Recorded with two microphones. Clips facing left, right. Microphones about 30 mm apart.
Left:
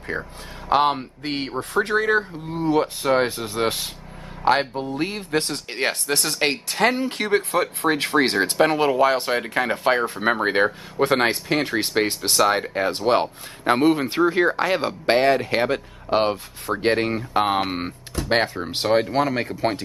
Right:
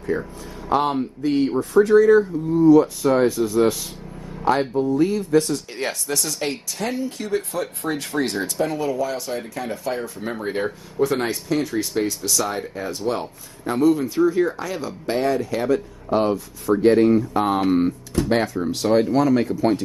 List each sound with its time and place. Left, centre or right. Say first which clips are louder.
0.1 s speech: right 2 dB; left